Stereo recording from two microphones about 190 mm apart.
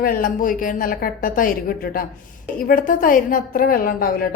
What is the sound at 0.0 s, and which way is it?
A woman's voice, 45° left (ahead or behind).